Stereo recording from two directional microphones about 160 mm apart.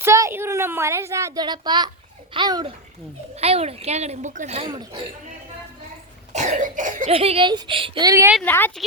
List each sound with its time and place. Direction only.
0.0 s a woman's voice: 15° right (ahead or behind)
3.3 s speech: 40° right (ahead or behind)
6.3 s cough: 50° right (ahead or behind)
7.1 s speech: 35° right (ahead or behind); by 8.3 s 20° right (ahead or behind)
8.4 s a woman's voice: 10° left (ahead or behind)